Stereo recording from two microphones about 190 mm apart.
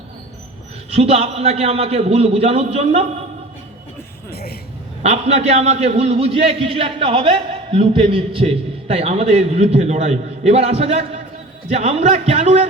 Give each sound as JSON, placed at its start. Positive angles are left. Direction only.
{"t": 0.9, "sound": "a man's voice", "side_deg": -30}
{"t": 4.3, "sound": "music", "side_deg": 55}
{"t": 5.0, "sound": "a man's voice", "side_deg": -35}